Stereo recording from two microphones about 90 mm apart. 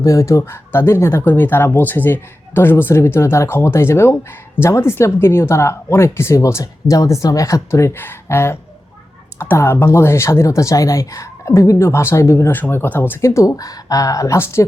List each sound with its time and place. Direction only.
0.0 s speech: 35° left (ahead or behind)